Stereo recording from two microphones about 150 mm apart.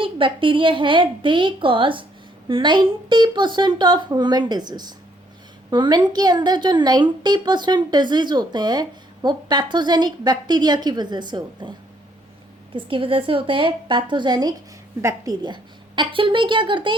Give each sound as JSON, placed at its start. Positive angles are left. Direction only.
{"t": 0.0, "sound": "a woman's voice", "side_deg": -35}
{"t": 12.7, "sound": "a woman's voice", "side_deg": -35}